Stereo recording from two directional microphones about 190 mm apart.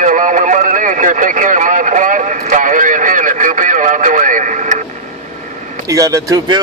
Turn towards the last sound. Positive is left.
turn(degrees=-20)  # may be behind; listen again after turning